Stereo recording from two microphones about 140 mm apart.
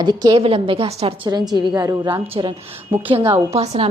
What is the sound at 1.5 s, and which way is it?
A woman's voice, 30° right (ahead or behind).